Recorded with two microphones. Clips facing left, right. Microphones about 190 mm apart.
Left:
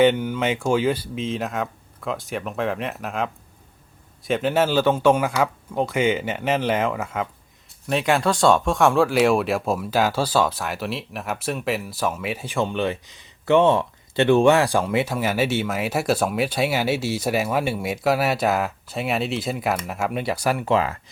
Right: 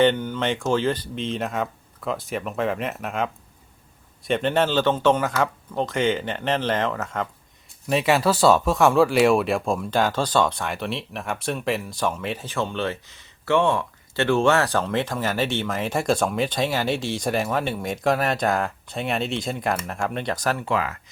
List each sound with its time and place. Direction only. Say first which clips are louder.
0.0 s speech: left 2 dB; 10° left (ahead or behind)
4.3 s speech: left 1 dB; 5° left (ahead or behind)
20.7 s speech: left 4 dB; 25° left (ahead or behind)